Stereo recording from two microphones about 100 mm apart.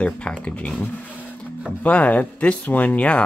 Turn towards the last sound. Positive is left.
turn(degrees=15)  # may be behind; listen again after turning